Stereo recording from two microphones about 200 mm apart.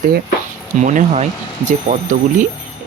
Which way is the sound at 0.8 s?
40° right (ahead or behind).